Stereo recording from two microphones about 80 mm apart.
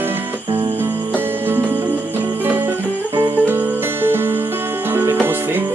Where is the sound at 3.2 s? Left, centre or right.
Right.